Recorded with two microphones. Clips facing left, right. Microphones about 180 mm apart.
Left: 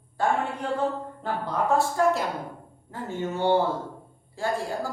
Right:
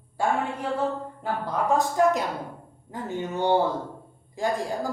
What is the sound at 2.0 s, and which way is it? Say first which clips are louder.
A man's voice: right 1 dB; 15° right (ahead or behind).